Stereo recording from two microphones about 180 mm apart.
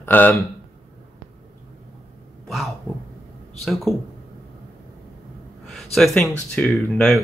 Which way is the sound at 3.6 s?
Centre (ahead or behind).